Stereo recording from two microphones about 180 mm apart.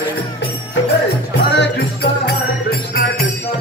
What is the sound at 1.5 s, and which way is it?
Music, 70° left (ahead or behind).